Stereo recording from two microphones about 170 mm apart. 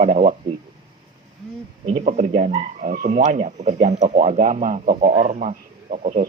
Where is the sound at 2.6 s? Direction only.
55° right (ahead or behind).